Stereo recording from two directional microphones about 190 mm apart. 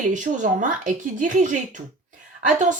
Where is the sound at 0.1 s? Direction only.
40° right (ahead or behind).